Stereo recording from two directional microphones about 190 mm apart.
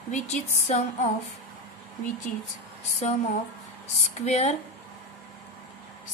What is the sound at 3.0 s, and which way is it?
A woman's voice, 35° left (ahead or behind).